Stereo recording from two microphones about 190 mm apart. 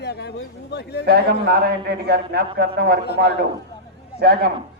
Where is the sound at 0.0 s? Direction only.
60° left (ahead or behind).